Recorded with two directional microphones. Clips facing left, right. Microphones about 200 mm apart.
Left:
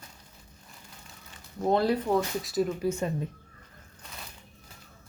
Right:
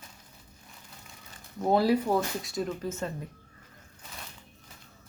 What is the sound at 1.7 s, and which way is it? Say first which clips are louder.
Speech: right 1 dB; 10° right (ahead or behind).